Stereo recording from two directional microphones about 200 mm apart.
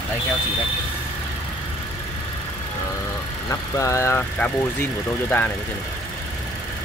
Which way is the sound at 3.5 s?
15° left (ahead or behind).